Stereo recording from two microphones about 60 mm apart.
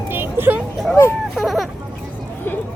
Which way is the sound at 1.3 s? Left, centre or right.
Centre.